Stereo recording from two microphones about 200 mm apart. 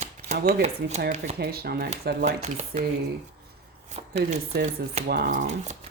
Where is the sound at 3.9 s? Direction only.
35° right (ahead or behind).